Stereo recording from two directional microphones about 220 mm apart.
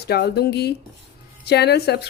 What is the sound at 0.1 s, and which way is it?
Speech, 45° left (ahead or behind).